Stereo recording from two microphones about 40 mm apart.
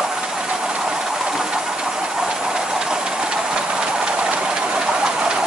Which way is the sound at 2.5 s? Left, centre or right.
Centre.